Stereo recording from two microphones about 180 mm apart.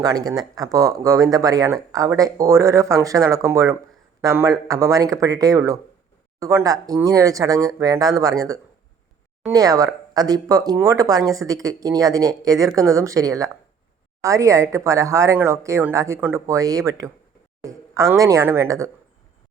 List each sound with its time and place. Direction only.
0.0 s speech: 20° right (ahead or behind)